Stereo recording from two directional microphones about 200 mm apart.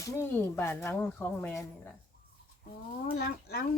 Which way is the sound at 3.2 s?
55° left (ahead or behind).